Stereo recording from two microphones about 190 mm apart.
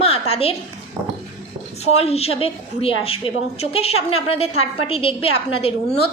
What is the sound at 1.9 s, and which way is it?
A woman's voice, 30° left (ahead or behind).